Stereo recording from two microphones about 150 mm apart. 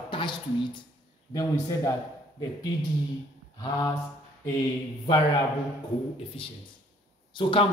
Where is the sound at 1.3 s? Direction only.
25° left (ahead or behind).